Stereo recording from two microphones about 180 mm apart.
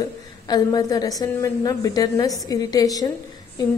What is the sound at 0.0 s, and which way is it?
A woman's voice, 20° left (ahead or behind).